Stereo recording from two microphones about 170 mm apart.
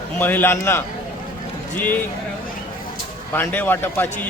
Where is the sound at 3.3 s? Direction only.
10° left (ahead or behind).